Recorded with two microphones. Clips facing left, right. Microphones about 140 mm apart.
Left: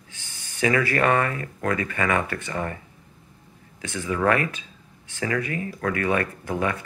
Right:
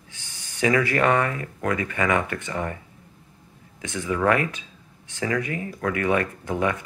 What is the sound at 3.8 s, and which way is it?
Speech, 15° right (ahead or behind).